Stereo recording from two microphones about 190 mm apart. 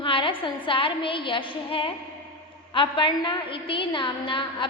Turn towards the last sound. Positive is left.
turn(degrees=25)  # may be behind; listen again after turning